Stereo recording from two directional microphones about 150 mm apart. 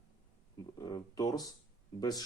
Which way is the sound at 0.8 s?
25° left (ahead or behind).